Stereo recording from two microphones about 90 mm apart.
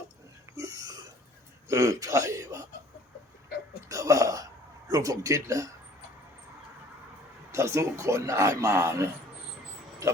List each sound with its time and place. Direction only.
0.5 s burping: 35° right (ahead or behind)
1.6 s a man's voice: 35° right (ahead or behind)
3.8 s a sound: 35° right (ahead or behind)
4.9 s a man's voice: 40° right (ahead or behind)
7.5 s a man's voice: 35° right (ahead or behind)